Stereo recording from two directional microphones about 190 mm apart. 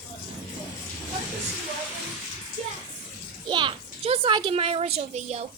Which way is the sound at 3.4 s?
25° right (ahead or behind).